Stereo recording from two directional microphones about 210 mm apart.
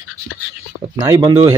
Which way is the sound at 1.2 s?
15° right (ahead or behind).